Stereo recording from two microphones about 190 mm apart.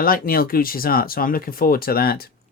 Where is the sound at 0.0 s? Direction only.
50° left (ahead or behind).